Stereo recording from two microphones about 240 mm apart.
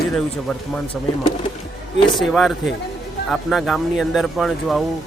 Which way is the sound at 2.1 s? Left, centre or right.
Centre.